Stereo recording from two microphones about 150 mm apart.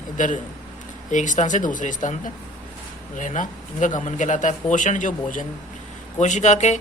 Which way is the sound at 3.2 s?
55° left (ahead or behind).